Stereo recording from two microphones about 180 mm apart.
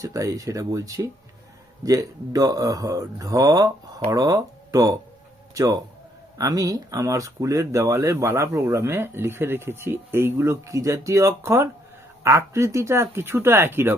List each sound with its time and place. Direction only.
0.0 s speech: 20° right (ahead or behind)